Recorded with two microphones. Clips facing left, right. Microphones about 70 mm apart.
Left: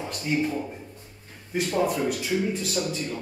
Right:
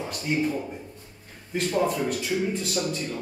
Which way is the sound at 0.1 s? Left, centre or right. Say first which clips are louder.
Left 1 dB; centre.